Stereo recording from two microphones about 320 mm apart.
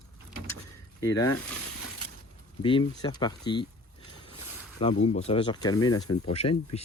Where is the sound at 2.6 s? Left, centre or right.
Centre.